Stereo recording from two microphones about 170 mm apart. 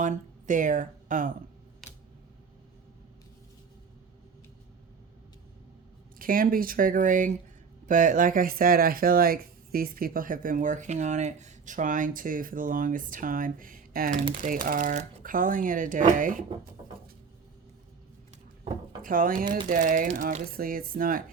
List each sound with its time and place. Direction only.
0.0 s speech: 50° right (ahead or behind)
1.8 s a sound: centre (ahead or behind)
6.1 s speech: 55° right (ahead or behind)
18.6 s speech: 55° right (ahead or behind)